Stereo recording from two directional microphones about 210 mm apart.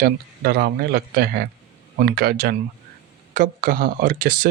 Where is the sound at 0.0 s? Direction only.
45° right (ahead or behind).